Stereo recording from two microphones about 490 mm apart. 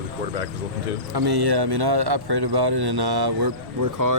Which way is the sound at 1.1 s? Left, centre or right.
Right.